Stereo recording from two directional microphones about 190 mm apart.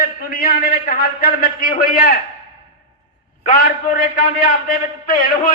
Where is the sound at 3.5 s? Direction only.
50° left (ahead or behind).